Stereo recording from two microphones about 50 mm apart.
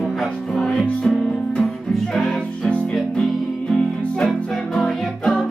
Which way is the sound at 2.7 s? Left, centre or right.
Left.